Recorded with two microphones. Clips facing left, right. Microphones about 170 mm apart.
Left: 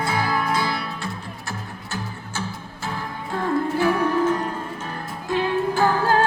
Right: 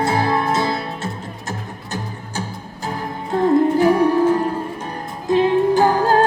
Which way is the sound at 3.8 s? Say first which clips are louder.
Right 6 dB; 35° right (ahead or behind).